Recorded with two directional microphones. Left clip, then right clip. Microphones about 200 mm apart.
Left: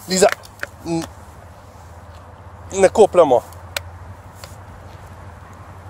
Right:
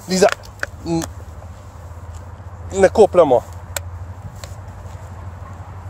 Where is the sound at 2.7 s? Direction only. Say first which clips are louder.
Right 1 dB; centre (ahead or behind).